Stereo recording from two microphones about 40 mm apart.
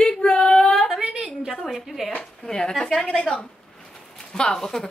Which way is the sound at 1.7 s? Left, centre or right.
Centre.